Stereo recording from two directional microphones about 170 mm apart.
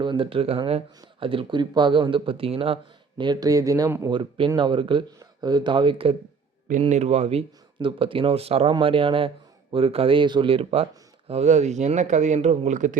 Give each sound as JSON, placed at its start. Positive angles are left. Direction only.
{"t": 0.0, "sound": "speech", "side_deg": -30}
{"t": 3.2, "sound": "speech", "side_deg": -25}
{"t": 4.1, "sound": "speech", "side_deg": -30}
{"t": 6.7, "sound": "speech", "side_deg": -45}